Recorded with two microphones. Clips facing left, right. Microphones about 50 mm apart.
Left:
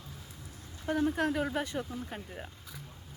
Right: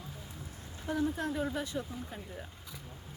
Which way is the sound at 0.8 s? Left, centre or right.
Left.